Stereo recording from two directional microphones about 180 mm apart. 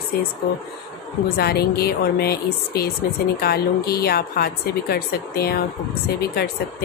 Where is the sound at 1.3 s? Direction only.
60° left (ahead or behind).